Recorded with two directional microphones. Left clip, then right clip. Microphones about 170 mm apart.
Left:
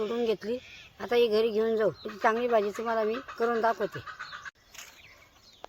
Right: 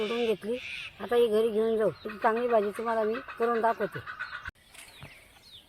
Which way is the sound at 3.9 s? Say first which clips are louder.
Right 2 dB; 75° left (ahead or behind).